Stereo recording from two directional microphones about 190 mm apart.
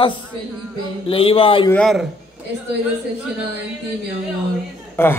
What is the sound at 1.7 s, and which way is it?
Speech, centre (ahead or behind).